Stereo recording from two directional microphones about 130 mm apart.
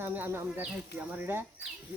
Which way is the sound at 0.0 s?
15° right (ahead or behind).